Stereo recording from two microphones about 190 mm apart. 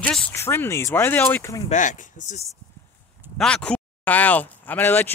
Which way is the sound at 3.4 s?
5° left (ahead or behind).